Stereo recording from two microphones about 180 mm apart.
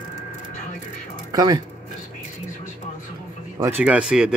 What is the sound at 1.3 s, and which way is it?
Speech, 20° right (ahead or behind).